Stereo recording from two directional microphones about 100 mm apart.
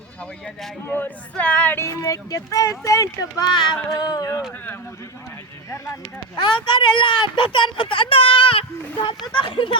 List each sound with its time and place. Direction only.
0.2 s speech: 5° left (ahead or behind)
0.9 s speech: 20° left (ahead or behind)
1.8 s speech: 30° left (ahead or behind)
3.5 s speech: 45° left (ahead or behind)
3.9 s speech: 35° left (ahead or behind)
5.7 s speech: 30° left (ahead or behind)
6.3 s speech: 50° left (ahead or behind)
9.0 s speech: 50° left (ahead or behind)